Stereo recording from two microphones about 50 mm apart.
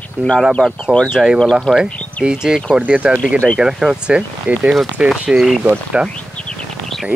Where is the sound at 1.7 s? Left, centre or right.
Centre.